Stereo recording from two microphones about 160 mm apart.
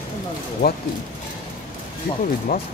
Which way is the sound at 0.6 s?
90° left.